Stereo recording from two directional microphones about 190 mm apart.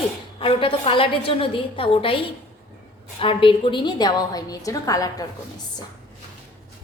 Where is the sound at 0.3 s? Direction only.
30° left (ahead or behind).